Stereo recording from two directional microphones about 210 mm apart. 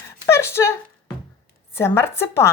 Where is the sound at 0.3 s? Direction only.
10° left (ahead or behind).